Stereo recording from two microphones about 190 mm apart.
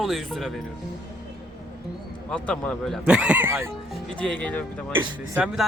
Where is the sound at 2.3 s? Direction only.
5° left (ahead or behind); by 3.7 s 15° right (ahead or behind).